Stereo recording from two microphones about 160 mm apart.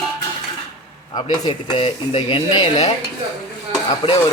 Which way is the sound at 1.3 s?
25° left (ahead or behind).